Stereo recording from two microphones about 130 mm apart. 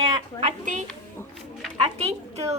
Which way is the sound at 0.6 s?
75° right (ahead or behind).